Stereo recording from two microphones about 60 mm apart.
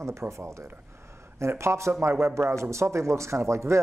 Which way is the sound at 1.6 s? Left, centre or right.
Right.